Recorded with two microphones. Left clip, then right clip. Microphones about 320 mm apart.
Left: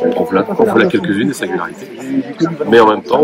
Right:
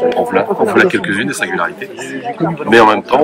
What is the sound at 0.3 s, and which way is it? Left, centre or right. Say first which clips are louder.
A man's voice: left 1 dB; centre.